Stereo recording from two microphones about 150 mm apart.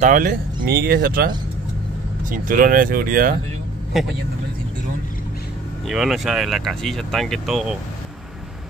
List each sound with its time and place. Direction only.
0.0 s speech: 60° right (ahead or behind)
0.7 s speech: 90° right
2.2 s speech: 65° right (ahead or behind)
3.9 s speech: centre (ahead or behind)
5.9 s speech: centre (ahead or behind)